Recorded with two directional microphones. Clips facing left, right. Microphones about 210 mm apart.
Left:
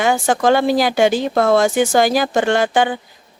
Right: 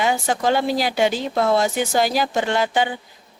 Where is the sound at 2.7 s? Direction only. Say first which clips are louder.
Left 5 dB; 80° left.